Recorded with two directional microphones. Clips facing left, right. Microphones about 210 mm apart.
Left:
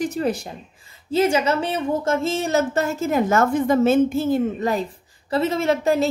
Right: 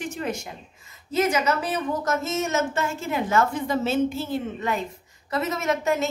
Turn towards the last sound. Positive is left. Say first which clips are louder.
# left 5 dB
turn(degrees=30)  # may be behind; listen again after turning